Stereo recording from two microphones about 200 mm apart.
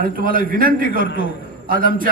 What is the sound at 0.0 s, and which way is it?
A man's voice, 45° right (ahead or behind).